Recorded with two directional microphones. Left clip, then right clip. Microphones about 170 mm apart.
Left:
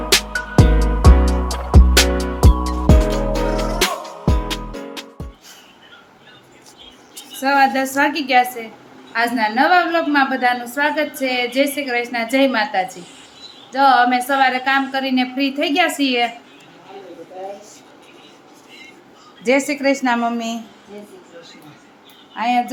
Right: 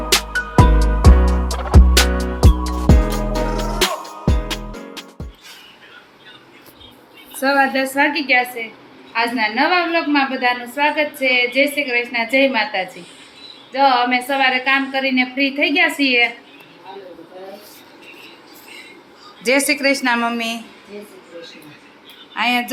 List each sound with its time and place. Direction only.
0.1 s music: centre (ahead or behind)
7.3 s speech: 20° right (ahead or behind)
7.7 s a woman's voice: 15° left (ahead or behind)
19.5 s a woman's voice: 10° left (ahead or behind)
22.4 s speech: 5° left (ahead or behind)